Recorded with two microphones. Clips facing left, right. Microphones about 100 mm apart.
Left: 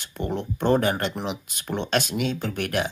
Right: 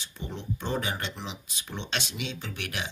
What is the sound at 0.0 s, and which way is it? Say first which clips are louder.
Speech: left 10 dB; 60° left (ahead or behind).